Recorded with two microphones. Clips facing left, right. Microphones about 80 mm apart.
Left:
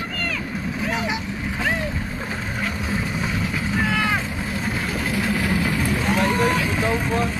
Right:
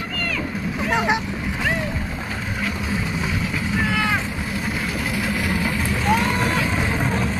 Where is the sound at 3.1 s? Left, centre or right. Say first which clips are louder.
Even; centre.